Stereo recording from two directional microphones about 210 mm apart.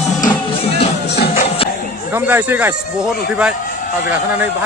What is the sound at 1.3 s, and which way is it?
Music, 30° left (ahead or behind).